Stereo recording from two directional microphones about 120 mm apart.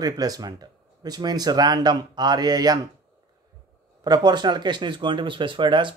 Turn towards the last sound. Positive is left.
turn(degrees=-40)  # may be behind; listen again after turning